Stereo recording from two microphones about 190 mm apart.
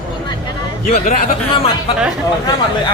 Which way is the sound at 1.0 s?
35° left (ahead or behind).